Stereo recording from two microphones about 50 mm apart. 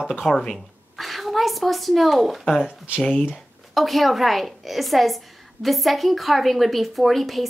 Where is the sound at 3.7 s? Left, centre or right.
Centre.